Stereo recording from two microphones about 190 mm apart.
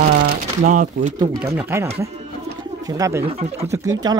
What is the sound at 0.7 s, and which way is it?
Speech, 40° right (ahead or behind).